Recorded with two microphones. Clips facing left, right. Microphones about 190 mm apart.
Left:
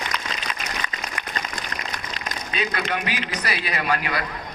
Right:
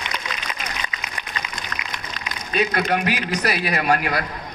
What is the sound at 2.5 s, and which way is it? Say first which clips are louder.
A man's voice: right 6 dB; 50° right (ahead or behind).